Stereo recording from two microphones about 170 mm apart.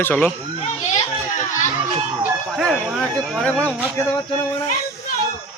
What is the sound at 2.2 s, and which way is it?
Speech, centre (ahead or behind).